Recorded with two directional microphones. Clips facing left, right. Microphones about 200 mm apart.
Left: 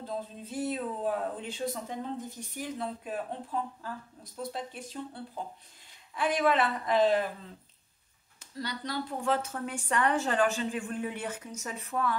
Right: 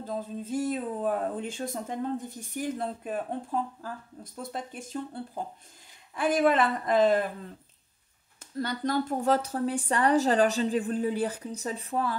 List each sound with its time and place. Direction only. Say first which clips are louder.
0.0 s speech: right 4 dB; 45° right (ahead or behind)
4.2 s speech: even; 50° right (ahead or behind)
8.4 s speech: right 6 dB; 50° right (ahead or behind); by 12.2 s 30° right (ahead or behind)